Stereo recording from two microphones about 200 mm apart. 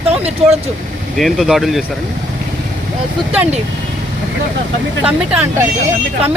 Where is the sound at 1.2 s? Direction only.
Centre (ahead or behind).